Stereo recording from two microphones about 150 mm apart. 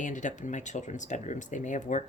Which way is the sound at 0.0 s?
55° left (ahead or behind).